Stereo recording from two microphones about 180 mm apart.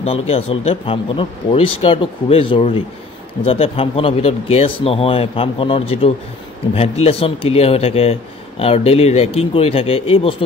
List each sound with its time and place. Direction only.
0.0 s speech: 35° left (ahead or behind)